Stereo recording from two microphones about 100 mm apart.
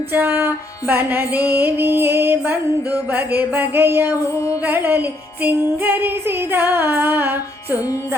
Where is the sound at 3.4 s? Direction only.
20° right (ahead or behind).